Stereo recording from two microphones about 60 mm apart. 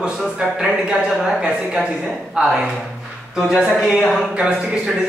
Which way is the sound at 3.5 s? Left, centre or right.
Centre.